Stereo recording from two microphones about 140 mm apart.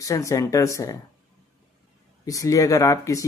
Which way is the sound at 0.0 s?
25° left (ahead or behind).